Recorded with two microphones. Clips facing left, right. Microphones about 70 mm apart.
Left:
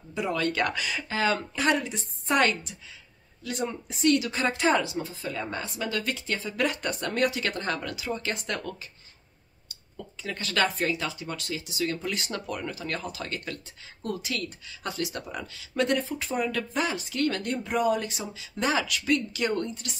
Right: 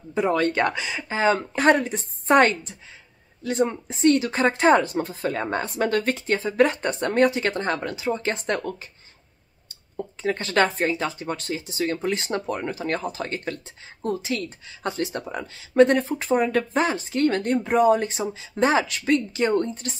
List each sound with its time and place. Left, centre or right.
0.1 s speech: right
1.5 s speech: right
9.9 s speech: right